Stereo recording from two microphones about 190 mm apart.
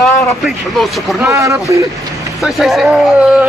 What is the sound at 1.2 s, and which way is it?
Speech, 15° right (ahead or behind).